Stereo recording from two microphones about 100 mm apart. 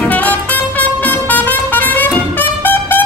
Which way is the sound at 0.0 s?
15° left (ahead or behind).